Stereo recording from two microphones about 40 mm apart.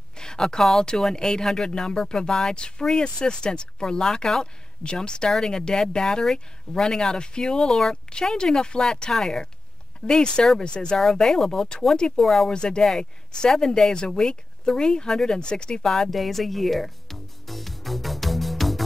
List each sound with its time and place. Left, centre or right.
0.2 s speech: centre
9.1 s speech: centre
11.0 s speech: centre
12.2 s speech: centre
12.4 s speech: left
15.9 s music: centre